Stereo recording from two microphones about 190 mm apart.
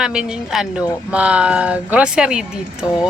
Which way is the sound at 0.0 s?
5° right (ahead or behind).